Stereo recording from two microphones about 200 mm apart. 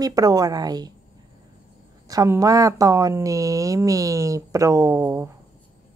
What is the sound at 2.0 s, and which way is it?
Speech, 15° right (ahead or behind).